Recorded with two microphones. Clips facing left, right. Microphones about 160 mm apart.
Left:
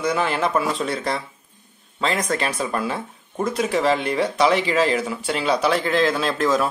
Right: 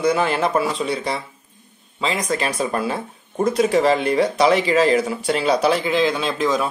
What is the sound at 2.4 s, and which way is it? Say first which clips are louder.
Speech: right 2 dB; 35° right (ahead or behind).